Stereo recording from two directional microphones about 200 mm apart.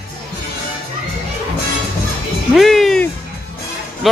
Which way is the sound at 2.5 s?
Centre (ahead or behind).